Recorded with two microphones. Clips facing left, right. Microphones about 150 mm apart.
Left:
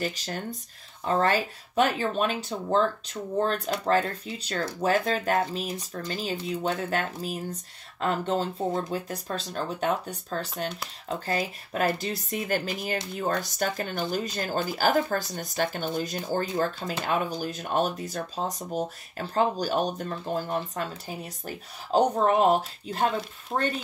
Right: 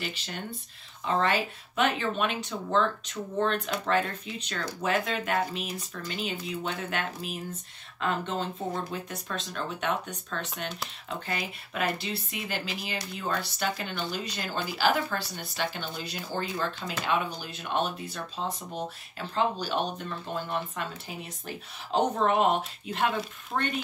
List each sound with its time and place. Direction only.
0.0 s speech: 40° left (ahead or behind)
21.9 s speech: 40° left (ahead or behind)